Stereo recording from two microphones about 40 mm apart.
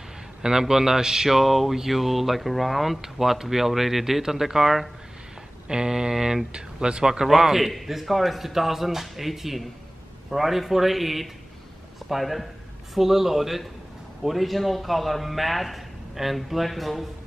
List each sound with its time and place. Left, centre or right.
0.4 s speech: centre
5.7 s a sound: centre
6.5 s speech: right
7.2 s speech: centre